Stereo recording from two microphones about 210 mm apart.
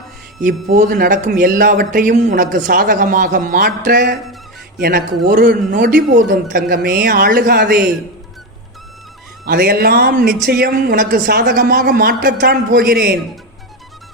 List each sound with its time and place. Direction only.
0.4 s a man's voice: 40° right (ahead or behind)
9.5 s speech: 45° right (ahead or behind)